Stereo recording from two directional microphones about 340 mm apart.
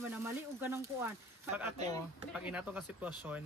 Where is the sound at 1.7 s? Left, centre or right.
Centre.